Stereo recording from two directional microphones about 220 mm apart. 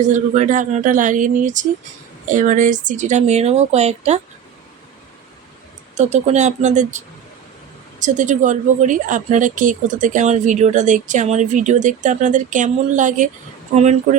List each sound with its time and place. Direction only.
0.0 s speech: 35° right (ahead or behind)
5.9 s speech: 30° right (ahead or behind)